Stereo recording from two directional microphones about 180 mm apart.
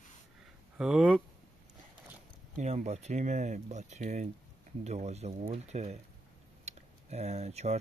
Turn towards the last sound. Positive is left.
turn(degrees=-35)  # may be behind; listen again after turning